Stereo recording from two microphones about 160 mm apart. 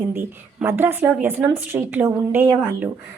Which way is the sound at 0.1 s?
15° right (ahead or behind).